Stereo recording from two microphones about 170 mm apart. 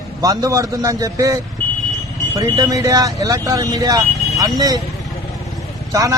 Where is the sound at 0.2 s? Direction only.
20° right (ahead or behind).